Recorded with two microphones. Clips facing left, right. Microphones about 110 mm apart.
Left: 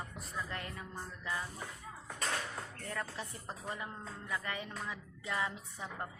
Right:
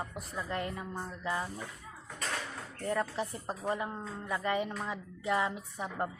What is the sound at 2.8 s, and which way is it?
Speech, 25° right (ahead or behind).